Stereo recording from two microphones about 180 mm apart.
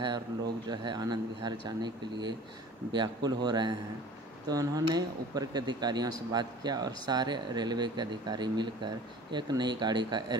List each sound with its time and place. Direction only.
0.7 s speech: 20° right (ahead or behind)